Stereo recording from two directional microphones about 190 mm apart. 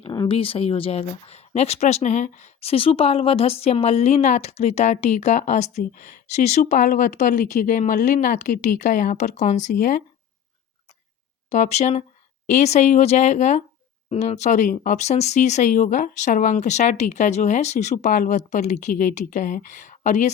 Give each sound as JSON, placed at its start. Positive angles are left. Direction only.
{"t": 0.0, "sound": "speech", "side_deg": 25}
{"t": 11.4, "sound": "speech", "side_deg": 35}